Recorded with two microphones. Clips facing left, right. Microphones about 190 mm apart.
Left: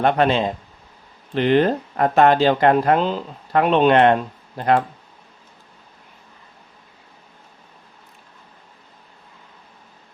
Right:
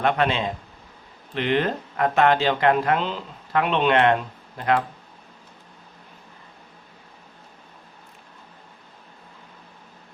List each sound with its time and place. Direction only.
0.0 s speech: 35° left (ahead or behind)